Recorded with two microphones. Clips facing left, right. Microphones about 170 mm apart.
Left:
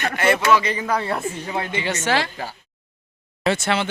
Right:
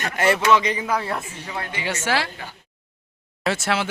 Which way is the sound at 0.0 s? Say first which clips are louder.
Left 1 dB; 40° right (ahead or behind).